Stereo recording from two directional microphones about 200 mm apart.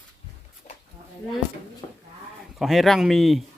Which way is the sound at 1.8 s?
20° left (ahead or behind).